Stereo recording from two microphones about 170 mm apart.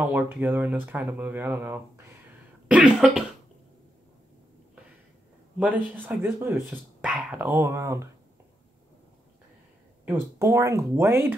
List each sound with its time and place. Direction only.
0.1 s speech: 10° right (ahead or behind)
2.7 s cough: 5° right (ahead or behind)
6.0 s speech: 15° right (ahead or behind)
10.0 s speech: 15° right (ahead or behind)